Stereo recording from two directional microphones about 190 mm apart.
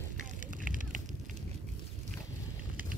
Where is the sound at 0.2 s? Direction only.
45° right (ahead or behind).